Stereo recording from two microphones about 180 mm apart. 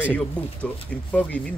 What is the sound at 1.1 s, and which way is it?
Speech, 10° left (ahead or behind).